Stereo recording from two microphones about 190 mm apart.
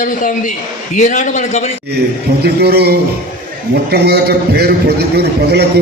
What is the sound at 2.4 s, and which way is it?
A man's voice, 60° right (ahead or behind).